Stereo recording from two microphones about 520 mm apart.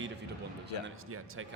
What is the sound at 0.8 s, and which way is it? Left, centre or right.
Speech, right.